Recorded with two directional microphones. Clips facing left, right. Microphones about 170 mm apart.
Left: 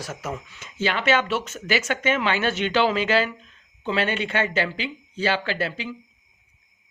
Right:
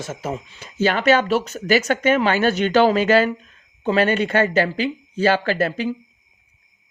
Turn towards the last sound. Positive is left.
turn(degrees=-45)  # may be behind; listen again after turning